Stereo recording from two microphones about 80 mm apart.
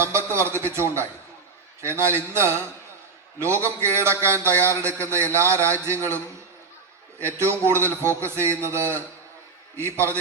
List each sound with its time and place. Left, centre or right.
0.0 s a man's voice: right